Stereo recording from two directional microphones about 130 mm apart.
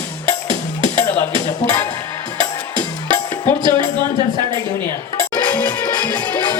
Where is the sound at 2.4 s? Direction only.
35° right (ahead or behind).